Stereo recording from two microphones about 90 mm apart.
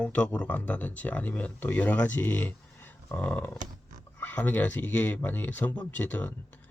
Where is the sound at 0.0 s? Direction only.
15° left (ahead or behind).